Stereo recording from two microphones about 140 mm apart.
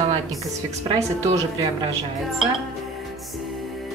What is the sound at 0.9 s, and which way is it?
Speech, 25° right (ahead or behind).